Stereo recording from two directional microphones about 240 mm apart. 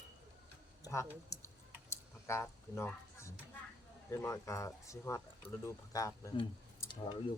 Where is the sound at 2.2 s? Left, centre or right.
Centre.